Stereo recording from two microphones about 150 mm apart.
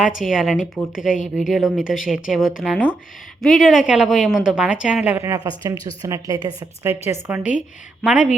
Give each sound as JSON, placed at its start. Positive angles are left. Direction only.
{"t": 0.0, "sound": "speech", "side_deg": -5}
{"t": 2.7, "sound": "speech", "side_deg": 10}
{"t": 3.4, "sound": "a woman's voice", "side_deg": 0}
{"t": 8.0, "sound": "speech", "side_deg": -5}